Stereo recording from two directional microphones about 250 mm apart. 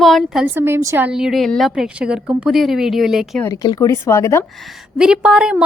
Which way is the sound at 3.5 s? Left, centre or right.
Centre.